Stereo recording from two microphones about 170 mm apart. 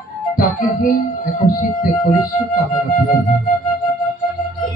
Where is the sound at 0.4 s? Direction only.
55° left (ahead or behind).